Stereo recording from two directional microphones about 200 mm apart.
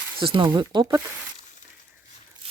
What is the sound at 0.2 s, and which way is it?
Speech, 25° right (ahead or behind).